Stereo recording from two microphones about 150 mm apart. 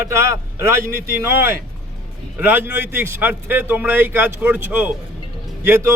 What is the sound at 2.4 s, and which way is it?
A man's voice, 15° right (ahead or behind).